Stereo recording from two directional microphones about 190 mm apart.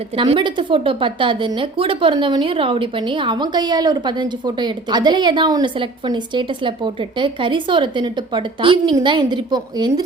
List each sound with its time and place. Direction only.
0.2 s a woman's voice: 25° right (ahead or behind)